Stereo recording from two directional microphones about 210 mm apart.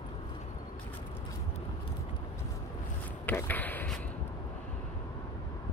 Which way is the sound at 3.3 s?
10° left (ahead or behind).